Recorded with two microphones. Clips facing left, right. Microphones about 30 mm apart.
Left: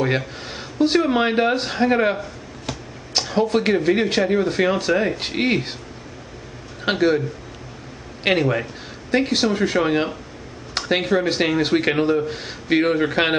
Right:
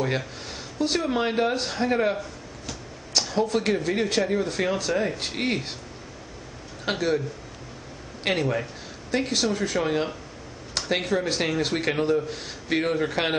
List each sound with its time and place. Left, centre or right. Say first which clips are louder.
0.5 s speech: left 8 dB; left
6.8 s a man's voice: left 6 dB; left